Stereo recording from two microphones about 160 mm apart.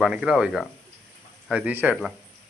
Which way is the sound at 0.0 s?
5° right (ahead or behind).